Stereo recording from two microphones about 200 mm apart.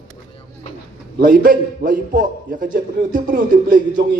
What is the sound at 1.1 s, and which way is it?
A man's voice, 45° right (ahead or behind).